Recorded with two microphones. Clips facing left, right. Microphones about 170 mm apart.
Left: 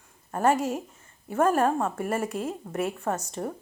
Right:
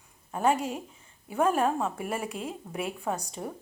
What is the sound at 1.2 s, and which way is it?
Speech, 5° right (ahead or behind).